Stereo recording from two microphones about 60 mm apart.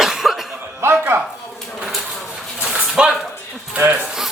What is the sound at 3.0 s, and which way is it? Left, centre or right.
Speech, centre.